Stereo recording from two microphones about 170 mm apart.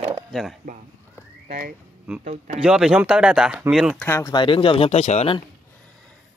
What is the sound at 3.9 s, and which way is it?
Speech, 15° left (ahead or behind).